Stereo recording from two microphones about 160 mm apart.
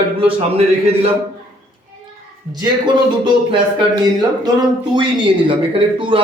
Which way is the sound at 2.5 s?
25° right (ahead or behind).